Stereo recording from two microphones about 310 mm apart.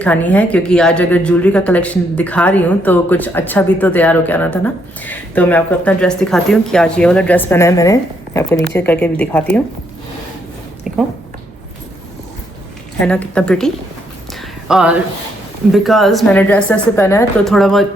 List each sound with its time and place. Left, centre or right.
0.0 s speech: centre
10.9 s speech: centre
13.1 s speech: centre
14.7 s speech: centre